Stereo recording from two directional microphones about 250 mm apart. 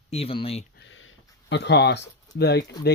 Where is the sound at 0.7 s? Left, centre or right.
Left.